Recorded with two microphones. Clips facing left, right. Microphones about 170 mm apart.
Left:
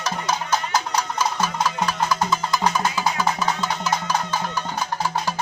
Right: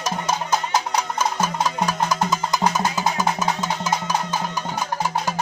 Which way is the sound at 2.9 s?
40° right (ahead or behind).